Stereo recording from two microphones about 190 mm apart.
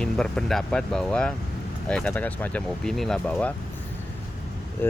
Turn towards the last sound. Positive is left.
turn(degrees=10)  # may be behind; listen again after turning